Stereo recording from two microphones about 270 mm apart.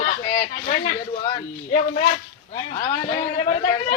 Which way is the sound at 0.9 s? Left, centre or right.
Left.